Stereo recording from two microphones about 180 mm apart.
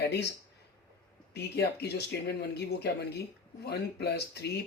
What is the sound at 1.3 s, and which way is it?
Speech, 65° left (ahead or behind).